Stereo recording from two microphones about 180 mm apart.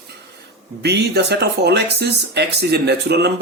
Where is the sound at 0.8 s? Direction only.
65° right (ahead or behind).